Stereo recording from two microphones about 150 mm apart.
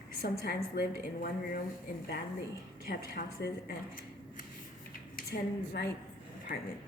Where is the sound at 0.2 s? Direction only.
90° left.